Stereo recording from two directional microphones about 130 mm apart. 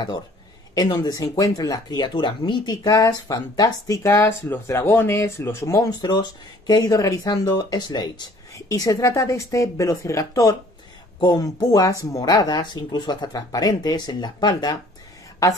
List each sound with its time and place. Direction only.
0.7 s speech: 35° left (ahead or behind)